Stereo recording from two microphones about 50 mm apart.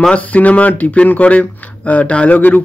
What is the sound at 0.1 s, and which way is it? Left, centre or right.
Speech, left.